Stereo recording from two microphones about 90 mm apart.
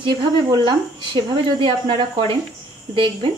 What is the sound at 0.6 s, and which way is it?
Speech, 60° right (ahead or behind).